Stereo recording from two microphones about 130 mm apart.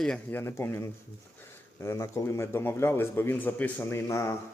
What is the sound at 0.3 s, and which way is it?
A man's voice, 20° left (ahead or behind).